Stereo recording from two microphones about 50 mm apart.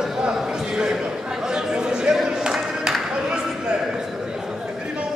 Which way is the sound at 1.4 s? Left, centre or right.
Centre.